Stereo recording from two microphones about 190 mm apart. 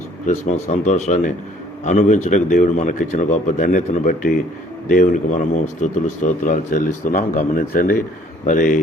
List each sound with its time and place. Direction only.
0.3 s a man's voice: 40° left (ahead or behind)